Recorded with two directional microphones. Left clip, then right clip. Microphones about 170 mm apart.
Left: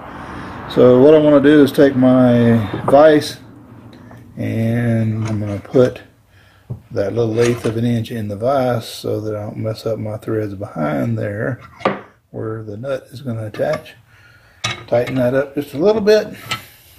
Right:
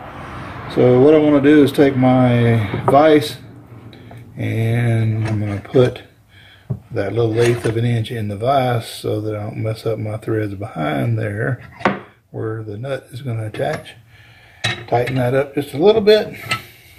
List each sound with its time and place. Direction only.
0.7 s speech: 35° left (ahead or behind)
4.4 s speech: 25° left (ahead or behind)
15.2 s speech: 25° left (ahead or behind)